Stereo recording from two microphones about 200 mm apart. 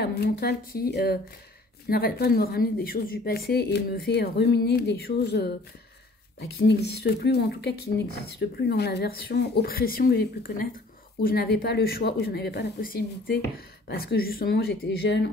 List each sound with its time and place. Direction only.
0.0 s a woman's voice: 55° left (ahead or behind)